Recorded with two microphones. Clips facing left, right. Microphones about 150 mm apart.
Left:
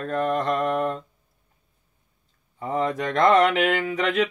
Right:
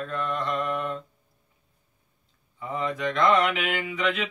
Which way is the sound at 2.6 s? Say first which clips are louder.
Left 5 dB; 45° left (ahead or behind).